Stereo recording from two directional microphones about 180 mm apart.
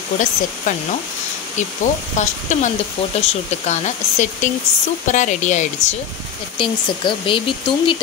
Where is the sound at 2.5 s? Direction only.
40° left (ahead or behind).